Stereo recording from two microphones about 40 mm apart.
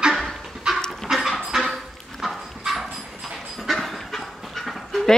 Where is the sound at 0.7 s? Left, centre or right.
Centre.